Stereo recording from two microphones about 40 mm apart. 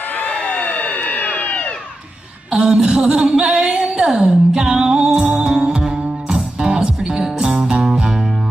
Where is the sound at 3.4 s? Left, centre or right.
Right.